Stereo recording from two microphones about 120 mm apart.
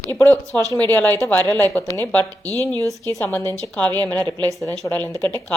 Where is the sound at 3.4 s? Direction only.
25° right (ahead or behind).